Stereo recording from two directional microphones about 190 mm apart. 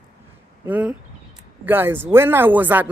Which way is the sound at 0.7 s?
10° right (ahead or behind).